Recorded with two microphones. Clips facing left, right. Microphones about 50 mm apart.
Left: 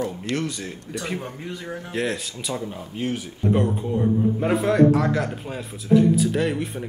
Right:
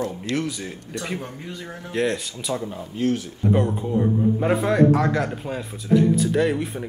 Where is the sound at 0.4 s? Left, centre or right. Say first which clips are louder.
Right 1 dB; centre.